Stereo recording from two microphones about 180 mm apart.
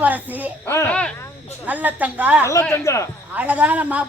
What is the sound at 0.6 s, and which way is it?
Speech, 15° left (ahead or behind).